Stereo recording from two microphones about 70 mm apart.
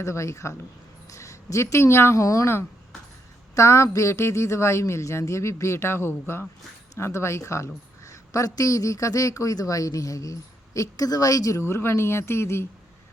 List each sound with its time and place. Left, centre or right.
0.0 s speech: left
11.6 s speech: left